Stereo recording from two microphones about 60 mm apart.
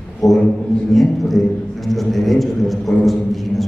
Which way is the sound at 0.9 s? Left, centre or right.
Centre.